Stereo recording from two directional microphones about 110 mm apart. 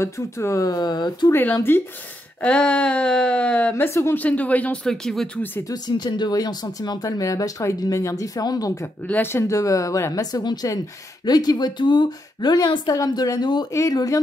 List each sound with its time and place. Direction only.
0.0 s speech: 25° left (ahead or behind); by 1.3 s 40° left (ahead or behind)
1.3 s speech: 20° left (ahead or behind)
5.7 s speech: 40° left (ahead or behind)
9.0 s speech: 15° left (ahead or behind); by 13.7 s 40° left (ahead or behind)
13.7 s speech: 30° left (ahead or behind)